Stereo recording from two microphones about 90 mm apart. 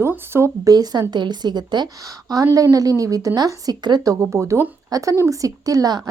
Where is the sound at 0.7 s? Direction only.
45° right (ahead or behind).